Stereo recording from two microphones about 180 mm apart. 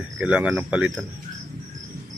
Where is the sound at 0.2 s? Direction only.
5° right (ahead or behind).